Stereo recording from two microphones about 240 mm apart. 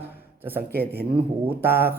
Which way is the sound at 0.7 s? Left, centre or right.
Right.